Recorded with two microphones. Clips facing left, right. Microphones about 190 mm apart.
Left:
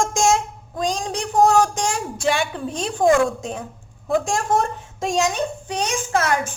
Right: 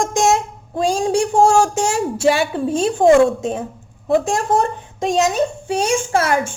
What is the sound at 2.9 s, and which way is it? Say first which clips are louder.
Speech: right 5 dB; 25° right (ahead or behind).